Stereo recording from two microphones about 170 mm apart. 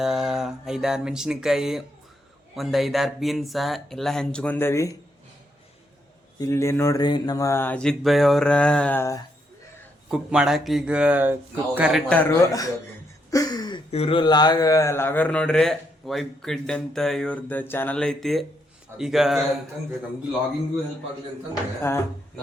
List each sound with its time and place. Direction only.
0.0 s speech: 5° right (ahead or behind); by 4.9 s 15° left (ahead or behind)
6.4 s speech: 15° left (ahead or behind)
10.1 s speech: 5° right (ahead or behind)
12.5 s a man's voice: 20° left (ahead or behind); by 19.5 s centre (ahead or behind)
21.8 s speech: 15° left (ahead or behind)